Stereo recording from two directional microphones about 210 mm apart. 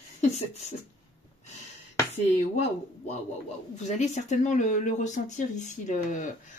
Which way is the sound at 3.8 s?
35° left (ahead or behind).